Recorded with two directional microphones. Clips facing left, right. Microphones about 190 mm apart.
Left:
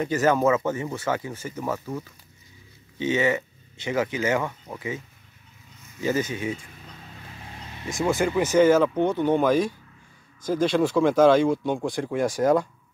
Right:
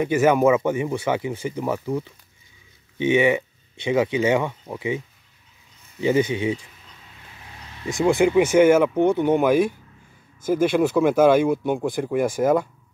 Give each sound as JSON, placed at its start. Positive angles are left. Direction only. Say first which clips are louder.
{"t": 0.0, "sound": "speech", "louder": "right 4 dB", "side_deg": -10}
{"t": 6.0, "sound": "speech", "louder": "right 5 dB", "side_deg": -15}
{"t": 8.2, "sound": "speech", "louder": "right 4 dB", "side_deg": -15}